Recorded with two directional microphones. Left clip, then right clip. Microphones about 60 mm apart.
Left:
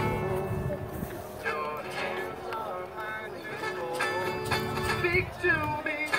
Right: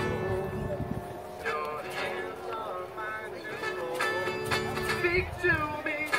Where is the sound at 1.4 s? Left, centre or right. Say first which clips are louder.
Even; right.